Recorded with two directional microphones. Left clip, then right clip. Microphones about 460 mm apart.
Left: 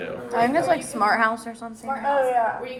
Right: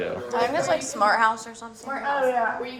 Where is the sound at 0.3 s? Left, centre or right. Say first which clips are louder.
Left 3 dB; centre.